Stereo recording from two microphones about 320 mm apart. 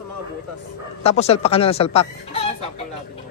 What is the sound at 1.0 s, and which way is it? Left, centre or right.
Speech, centre.